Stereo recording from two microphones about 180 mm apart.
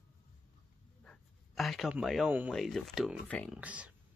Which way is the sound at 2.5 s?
Centre (ahead or behind).